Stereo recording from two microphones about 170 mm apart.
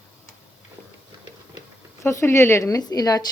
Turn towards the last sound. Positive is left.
turn(degrees=20)  # may be behind; listen again after turning